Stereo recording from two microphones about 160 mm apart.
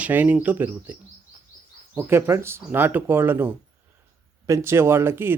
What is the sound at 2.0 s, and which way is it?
Speech, 15° right (ahead or behind).